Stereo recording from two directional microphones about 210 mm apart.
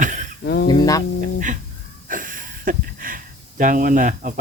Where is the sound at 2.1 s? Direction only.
40° right (ahead or behind).